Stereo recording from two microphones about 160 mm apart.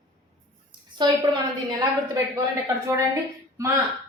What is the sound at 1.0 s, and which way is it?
Speech, 30° right (ahead or behind).